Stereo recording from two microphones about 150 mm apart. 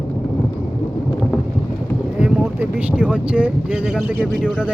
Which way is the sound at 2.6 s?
10° right (ahead or behind).